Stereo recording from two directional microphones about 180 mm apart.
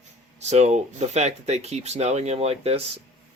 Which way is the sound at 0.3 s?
40° right (ahead or behind).